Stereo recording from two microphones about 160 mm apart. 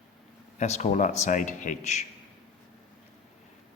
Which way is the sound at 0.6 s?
45° left (ahead or behind).